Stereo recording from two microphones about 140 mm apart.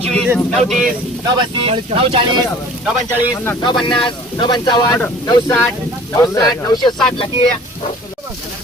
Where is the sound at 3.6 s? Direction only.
35° left (ahead or behind).